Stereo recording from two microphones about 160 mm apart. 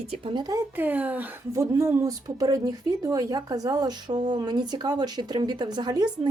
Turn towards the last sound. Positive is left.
turn(degrees=-25)  # may be behind; listen again after turning